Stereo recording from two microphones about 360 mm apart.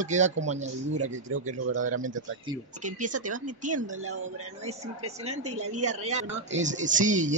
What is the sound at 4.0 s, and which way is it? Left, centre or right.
Speech, right.